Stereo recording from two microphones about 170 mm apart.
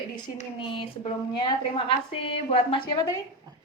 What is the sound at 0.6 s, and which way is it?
A woman's voice, 30° left (ahead or behind).